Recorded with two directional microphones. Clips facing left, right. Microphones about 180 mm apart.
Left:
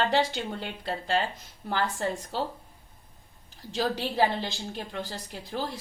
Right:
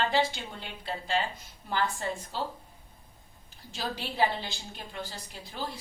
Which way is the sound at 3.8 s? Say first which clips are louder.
Left 4 dB; 40° left (ahead or behind).